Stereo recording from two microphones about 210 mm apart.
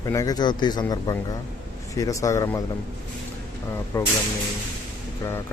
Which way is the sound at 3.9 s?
10° left (ahead or behind).